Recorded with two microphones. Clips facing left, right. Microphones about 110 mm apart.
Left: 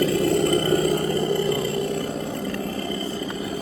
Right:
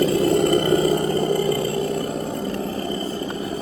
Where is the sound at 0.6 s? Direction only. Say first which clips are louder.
Right 2 dB; 20° right (ahead or behind).